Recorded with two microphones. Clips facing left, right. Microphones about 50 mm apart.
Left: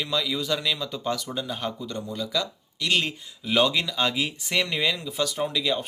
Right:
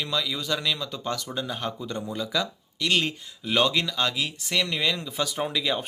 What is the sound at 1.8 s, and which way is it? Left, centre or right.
Speech, centre.